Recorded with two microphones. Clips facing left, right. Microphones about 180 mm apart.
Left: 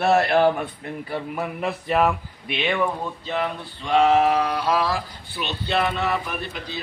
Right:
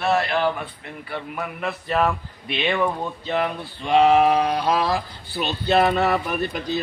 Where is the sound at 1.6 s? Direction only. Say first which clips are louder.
Left 1 dB; 10° left (ahead or behind).